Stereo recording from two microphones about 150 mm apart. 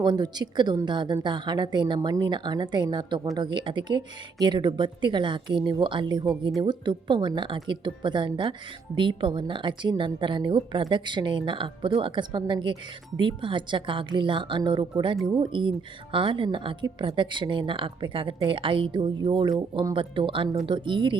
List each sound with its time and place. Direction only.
0.0 s a woman's voice: 30° right (ahead or behind)